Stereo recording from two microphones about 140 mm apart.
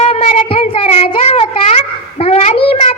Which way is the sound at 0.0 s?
45° left (ahead or behind).